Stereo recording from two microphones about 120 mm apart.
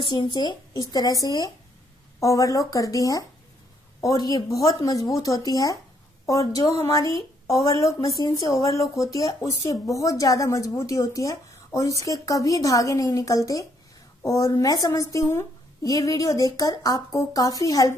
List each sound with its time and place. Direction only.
0.0 s a woman's voice: 40° left (ahead or behind)